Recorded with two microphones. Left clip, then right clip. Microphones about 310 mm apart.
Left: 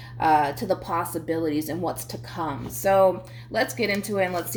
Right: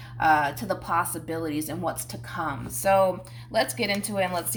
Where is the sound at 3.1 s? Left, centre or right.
Right.